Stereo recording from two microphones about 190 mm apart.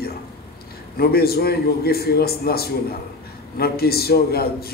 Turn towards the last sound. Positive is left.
turn(degrees=55)  # may be behind; listen again after turning